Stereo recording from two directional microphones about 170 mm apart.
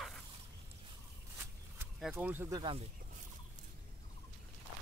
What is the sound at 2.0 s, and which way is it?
Speech, 5° right (ahead or behind).